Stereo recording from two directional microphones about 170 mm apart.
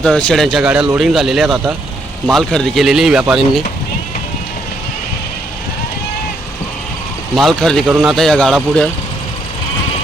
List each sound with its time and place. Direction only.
0.0 s speech: 5° left (ahead or behind)
7.3 s speech: centre (ahead or behind)